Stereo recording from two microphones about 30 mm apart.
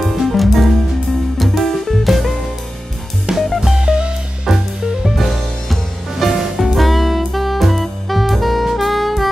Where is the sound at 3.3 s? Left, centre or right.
Right.